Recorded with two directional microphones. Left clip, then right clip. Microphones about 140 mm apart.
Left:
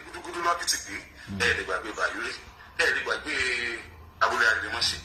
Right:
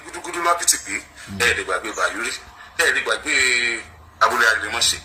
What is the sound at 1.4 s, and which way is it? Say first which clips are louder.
A man's voice: right 6 dB; 30° right (ahead or behind).